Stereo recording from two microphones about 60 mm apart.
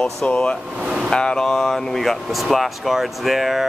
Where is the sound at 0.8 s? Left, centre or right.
Centre.